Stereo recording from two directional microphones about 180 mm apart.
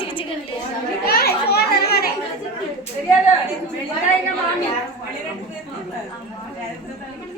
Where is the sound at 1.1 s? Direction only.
60° left (ahead or behind).